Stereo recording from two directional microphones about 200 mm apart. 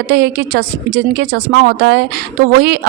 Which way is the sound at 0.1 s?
55° right (ahead or behind).